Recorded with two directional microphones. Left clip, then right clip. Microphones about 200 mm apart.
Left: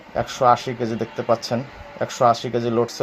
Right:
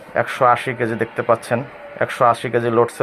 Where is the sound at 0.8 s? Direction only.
25° right (ahead or behind).